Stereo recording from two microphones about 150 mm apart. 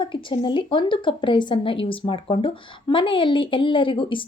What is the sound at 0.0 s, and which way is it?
Speech, 35° left (ahead or behind).